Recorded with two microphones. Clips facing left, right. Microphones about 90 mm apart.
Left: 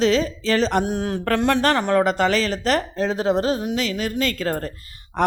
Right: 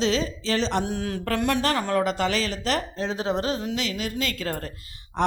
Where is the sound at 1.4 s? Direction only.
40° left (ahead or behind).